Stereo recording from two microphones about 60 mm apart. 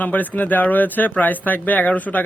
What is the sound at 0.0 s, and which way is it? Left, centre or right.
Speech, left.